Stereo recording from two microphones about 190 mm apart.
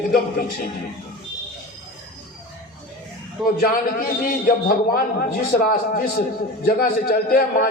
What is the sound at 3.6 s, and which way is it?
A man's voice, 50° left (ahead or behind).